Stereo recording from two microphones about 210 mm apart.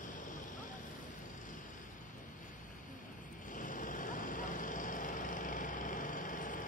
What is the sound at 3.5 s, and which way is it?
Vehicle, 40° left (ahead or behind).